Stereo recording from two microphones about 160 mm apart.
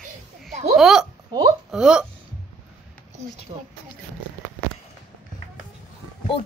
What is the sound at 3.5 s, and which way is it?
Speech, 40° right (ahead or behind).